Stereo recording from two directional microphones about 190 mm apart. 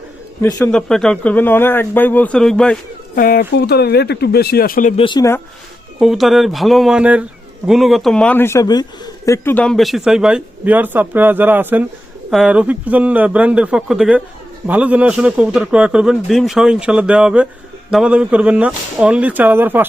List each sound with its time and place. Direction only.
0.4 s speech: 5° left (ahead or behind)
3.2 s speech: 50° left (ahead or behind)
4.9 s speech: 25° left (ahead or behind)
6.0 s a man's voice: centre (ahead or behind)